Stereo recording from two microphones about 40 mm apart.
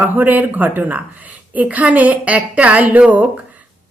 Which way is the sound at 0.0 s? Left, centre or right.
Right.